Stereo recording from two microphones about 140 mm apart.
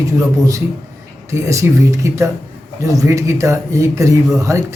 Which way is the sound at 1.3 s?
20° right (ahead or behind).